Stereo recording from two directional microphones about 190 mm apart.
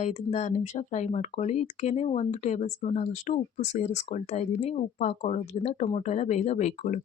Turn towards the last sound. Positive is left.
turn(degrees=40)  # may be behind; listen again after turning